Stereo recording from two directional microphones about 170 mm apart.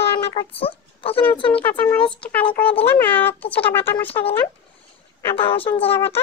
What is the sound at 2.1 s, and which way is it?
Speech, 5° left (ahead or behind).